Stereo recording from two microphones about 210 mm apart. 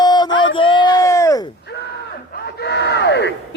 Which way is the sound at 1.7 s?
50° left (ahead or behind).